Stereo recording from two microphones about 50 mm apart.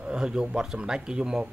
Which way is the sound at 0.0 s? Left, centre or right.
Centre.